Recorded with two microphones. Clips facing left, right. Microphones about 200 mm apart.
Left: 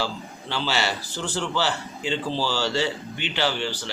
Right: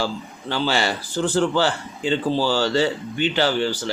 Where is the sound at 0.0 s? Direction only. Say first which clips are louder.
Right 4 dB; 45° right (ahead or behind).